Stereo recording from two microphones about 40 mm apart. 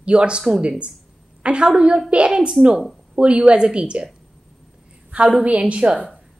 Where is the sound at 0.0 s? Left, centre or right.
Right.